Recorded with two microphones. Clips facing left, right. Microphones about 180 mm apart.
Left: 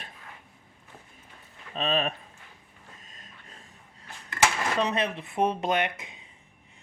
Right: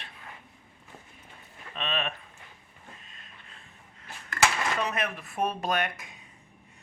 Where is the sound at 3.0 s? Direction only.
40° left (ahead or behind).